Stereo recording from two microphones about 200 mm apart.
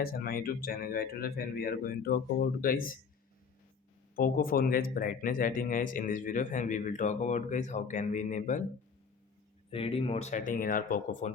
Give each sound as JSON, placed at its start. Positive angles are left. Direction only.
{"t": 0.0, "sound": "speech", "side_deg": 45}
{"t": 4.1, "sound": "speech", "side_deg": 45}
{"t": 9.6, "sound": "speech", "side_deg": 30}